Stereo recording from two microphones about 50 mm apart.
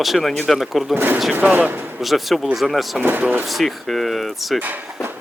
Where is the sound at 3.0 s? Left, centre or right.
Right.